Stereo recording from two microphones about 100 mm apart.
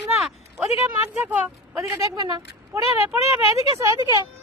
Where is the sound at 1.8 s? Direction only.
35° right (ahead or behind).